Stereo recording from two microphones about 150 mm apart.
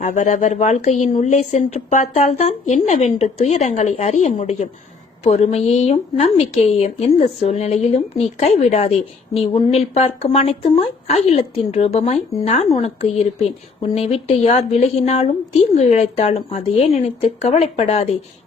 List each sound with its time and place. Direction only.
0.0 s speech: 55° left (ahead or behind)